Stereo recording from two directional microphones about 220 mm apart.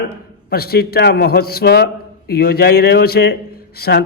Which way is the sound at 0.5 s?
45° left (ahead or behind).